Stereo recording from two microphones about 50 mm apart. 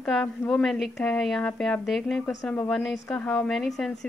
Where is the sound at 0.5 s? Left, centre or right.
Centre.